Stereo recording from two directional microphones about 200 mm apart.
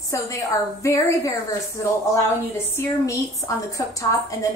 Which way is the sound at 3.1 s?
15° left (ahead or behind).